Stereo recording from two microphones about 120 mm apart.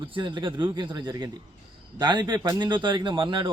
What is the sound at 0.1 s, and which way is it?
A man's voice, 45° right (ahead or behind).